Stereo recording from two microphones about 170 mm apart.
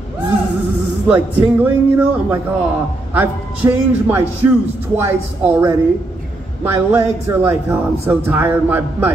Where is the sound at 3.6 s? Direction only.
20° right (ahead or behind).